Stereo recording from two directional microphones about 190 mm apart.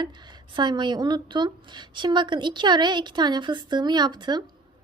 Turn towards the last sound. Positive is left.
turn(degrees=-20)  # may be behind; listen again after turning